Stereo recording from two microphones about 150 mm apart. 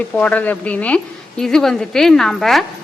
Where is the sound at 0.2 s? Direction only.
10° left (ahead or behind).